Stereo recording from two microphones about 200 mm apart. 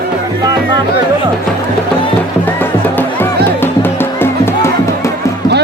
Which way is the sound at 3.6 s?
10° left (ahead or behind).